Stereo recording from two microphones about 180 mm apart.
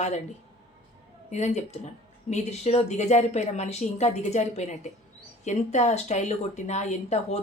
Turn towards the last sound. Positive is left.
turn(degrees=40)  # may be behind; listen again after turning